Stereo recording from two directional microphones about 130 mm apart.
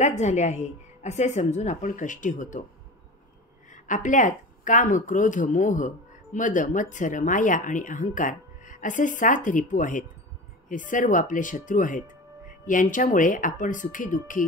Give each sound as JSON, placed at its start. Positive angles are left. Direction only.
{"t": 0.2, "sound": "a woman's voice", "side_deg": 65}
{"t": 3.7, "sound": "speech", "side_deg": 85}